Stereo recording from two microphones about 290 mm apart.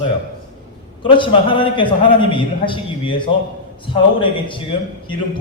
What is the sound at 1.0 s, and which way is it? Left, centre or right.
A man's voice, centre.